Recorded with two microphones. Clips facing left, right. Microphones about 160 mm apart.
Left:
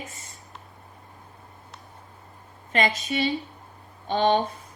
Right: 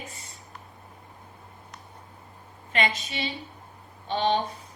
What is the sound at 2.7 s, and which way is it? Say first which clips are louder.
Speech: left 3 dB; 40° left (ahead or behind).